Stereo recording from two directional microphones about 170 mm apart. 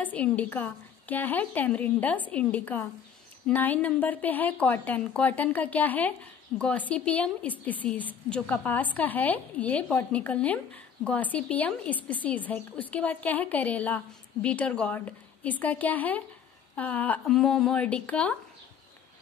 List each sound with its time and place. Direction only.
0.0 s a woman's voice: 10° left (ahead or behind)